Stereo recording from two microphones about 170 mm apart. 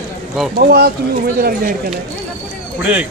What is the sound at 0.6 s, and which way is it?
Speech, 65° right (ahead or behind).